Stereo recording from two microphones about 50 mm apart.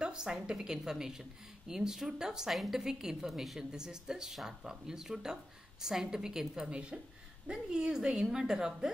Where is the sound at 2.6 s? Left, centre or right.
Centre.